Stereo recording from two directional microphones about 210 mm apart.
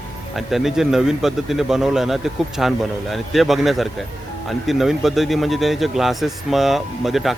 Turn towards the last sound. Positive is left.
turn(degrees=0)  # may be behind; listen again after turning